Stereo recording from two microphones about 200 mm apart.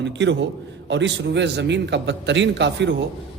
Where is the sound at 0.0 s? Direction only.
60° right (ahead or behind).